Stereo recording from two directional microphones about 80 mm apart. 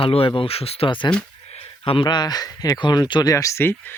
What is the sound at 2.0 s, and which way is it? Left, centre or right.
Speech, left.